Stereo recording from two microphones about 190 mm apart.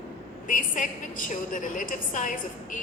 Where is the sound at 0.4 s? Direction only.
45° left (ahead or behind).